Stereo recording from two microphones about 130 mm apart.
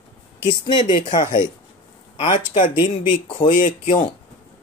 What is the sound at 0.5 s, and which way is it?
Speech, 40° left (ahead or behind).